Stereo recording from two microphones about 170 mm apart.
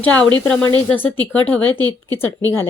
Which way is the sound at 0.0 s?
10° left (ahead or behind).